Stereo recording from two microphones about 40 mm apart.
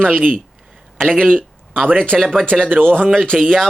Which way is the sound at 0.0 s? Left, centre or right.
Right.